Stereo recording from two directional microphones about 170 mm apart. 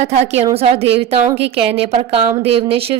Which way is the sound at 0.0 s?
40° right (ahead or behind).